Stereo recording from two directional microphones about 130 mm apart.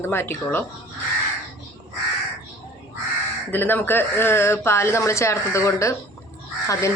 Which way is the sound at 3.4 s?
15° left (ahead or behind).